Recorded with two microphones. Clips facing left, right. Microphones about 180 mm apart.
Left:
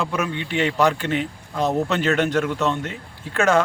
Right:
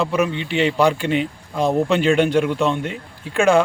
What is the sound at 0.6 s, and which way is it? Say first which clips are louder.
A man's voice: right 3 dB; 10° right (ahead or behind).